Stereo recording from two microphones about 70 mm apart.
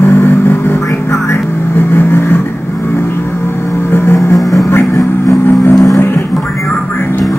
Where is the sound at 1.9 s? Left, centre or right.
Left.